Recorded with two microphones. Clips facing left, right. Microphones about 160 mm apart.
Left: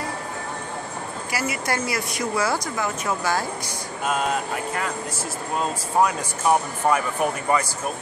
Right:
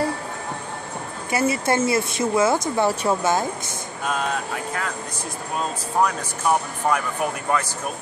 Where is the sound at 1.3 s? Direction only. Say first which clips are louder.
Right 6 dB; 25° right (ahead or behind).